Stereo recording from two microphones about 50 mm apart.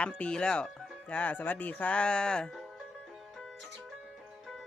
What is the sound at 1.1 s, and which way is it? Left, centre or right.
Speech, left.